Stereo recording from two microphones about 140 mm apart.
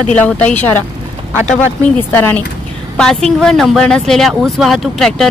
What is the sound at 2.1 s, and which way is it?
Speech, 15° left (ahead or behind).